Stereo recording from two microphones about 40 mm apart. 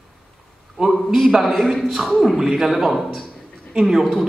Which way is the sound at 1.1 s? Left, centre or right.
Centre.